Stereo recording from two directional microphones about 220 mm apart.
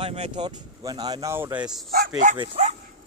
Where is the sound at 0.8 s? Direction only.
20° right (ahead or behind).